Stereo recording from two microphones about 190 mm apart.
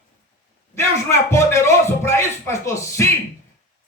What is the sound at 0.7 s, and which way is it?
Speech, 15° left (ahead or behind).